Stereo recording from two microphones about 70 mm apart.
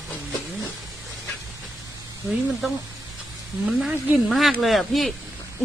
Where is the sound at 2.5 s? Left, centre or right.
Centre.